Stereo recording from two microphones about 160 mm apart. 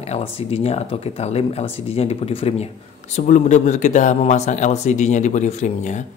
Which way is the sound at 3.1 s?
50° left (ahead or behind).